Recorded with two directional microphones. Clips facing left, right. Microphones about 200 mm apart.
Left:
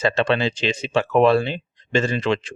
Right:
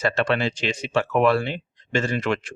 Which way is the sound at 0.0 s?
20° left (ahead or behind).